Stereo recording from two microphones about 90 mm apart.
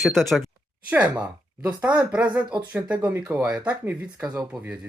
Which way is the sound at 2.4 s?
55° right (ahead or behind).